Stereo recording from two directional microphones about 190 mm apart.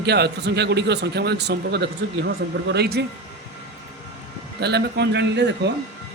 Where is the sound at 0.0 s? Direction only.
60° right (ahead or behind).